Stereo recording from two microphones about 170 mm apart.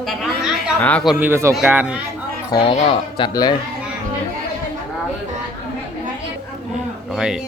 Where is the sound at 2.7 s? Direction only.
30° left (ahead or behind).